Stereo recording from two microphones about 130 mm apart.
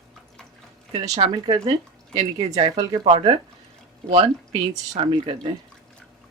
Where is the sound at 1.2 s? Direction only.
45° right (ahead or behind).